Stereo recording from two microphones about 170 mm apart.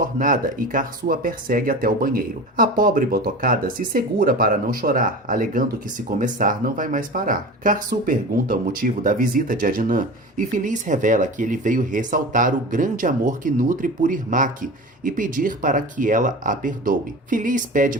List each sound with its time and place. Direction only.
0.0 s speech: 50° right (ahead or behind)